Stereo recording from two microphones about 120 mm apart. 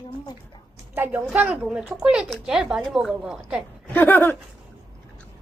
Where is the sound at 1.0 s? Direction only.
15° right (ahead or behind).